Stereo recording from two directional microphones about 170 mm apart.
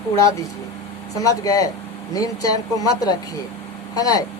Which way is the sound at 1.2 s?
20° left (ahead or behind).